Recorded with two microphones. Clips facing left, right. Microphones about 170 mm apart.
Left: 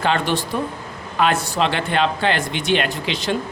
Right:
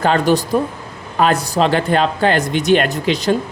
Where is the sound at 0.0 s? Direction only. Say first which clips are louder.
Right 6 dB; 40° right (ahead or behind).